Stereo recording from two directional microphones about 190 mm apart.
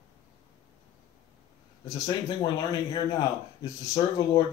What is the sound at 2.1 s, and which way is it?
Speech, 20° left (ahead or behind).